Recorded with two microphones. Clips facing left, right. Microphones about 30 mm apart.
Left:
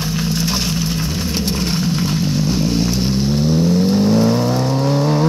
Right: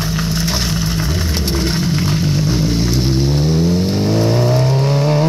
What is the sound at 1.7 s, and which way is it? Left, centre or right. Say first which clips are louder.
Vehicle: right 1 dB; right.